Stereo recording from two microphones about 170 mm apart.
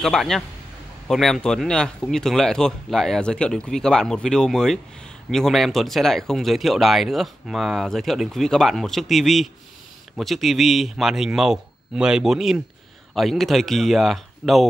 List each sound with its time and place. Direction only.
0.0 s speech: centre (ahead or behind)